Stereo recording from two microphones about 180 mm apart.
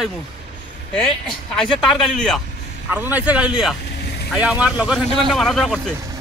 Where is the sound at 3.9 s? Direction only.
65° left (ahead or behind).